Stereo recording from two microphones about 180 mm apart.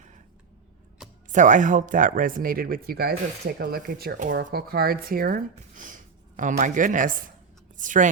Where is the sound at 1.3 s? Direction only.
45° right (ahead or behind).